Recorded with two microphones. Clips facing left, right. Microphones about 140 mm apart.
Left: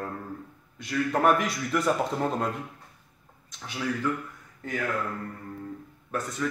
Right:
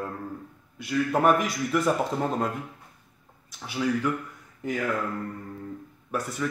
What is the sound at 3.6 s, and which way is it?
Speech, 10° right (ahead or behind).